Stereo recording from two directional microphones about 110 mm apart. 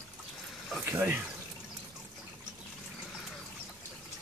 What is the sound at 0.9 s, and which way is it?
Speech, 20° right (ahead or behind).